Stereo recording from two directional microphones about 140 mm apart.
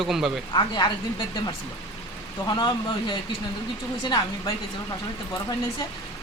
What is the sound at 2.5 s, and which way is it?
Speech, 30° left (ahead or behind).